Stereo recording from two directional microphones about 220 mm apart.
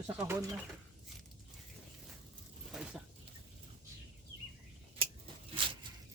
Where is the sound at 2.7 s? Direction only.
Centre (ahead or behind).